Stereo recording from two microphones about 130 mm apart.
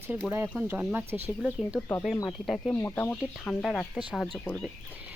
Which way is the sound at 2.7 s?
15° left (ahead or behind).